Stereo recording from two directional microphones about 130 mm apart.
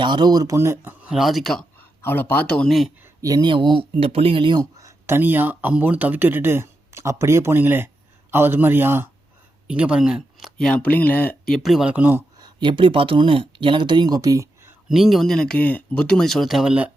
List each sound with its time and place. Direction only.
0.0 s speech: 35° right (ahead or behind)
1.0 s speech: 5° right (ahead or behind)
2.0 s speech: 15° left (ahead or behind)
3.2 s a man's voice: 25° right (ahead or behind)
12.4 s speech: 35° right (ahead or behind)
14.8 s speech: centre (ahead or behind)